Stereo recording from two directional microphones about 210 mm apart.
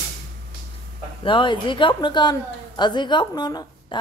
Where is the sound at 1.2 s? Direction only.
25° left (ahead or behind).